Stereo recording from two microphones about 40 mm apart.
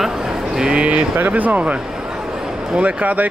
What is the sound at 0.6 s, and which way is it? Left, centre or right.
Speech, right.